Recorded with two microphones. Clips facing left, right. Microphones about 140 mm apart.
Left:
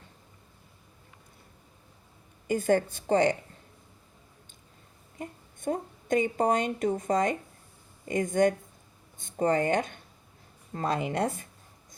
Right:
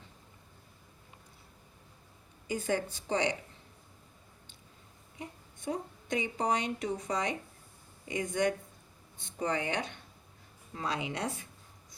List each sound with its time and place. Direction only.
2.5 s a woman's voice: 50° left (ahead or behind)
5.1 s a woman's voice: 50° left (ahead or behind)